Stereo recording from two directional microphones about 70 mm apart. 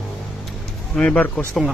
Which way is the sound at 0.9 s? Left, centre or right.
Centre.